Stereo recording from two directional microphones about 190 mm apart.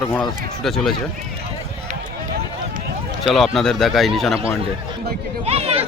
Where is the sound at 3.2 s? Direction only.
Centre (ahead or behind).